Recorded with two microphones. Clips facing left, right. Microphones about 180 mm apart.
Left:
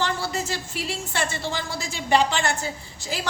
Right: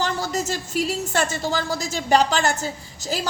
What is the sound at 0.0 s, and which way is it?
A woman's voice, 40° right (ahead or behind).